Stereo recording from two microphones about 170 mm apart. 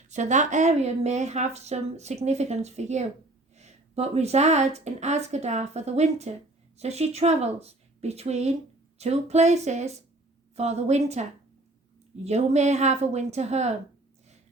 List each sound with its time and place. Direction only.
0.1 s speech: 45° right (ahead or behind)